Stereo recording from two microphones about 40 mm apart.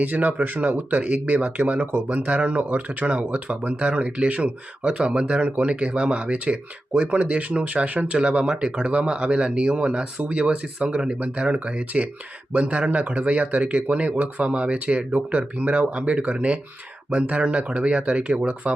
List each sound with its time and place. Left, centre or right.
0.0 s speech: right
10.8 s speech: centre
11.2 s speech: right